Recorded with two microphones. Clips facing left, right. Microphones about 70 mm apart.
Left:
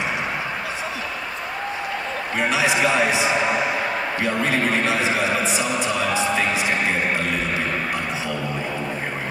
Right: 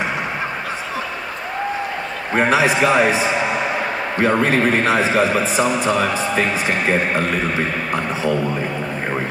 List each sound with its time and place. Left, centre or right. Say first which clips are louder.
2.3 s a man's voice: right 5 dB; right
7.9 s a man's voice: right 6 dB; right